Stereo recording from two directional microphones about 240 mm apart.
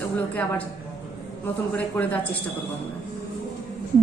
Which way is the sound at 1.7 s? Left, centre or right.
Centre.